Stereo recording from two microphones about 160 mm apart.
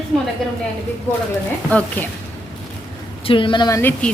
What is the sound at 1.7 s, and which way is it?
Speech, 10° left (ahead or behind).